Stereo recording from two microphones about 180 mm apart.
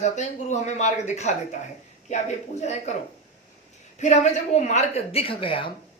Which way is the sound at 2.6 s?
40° left (ahead or behind).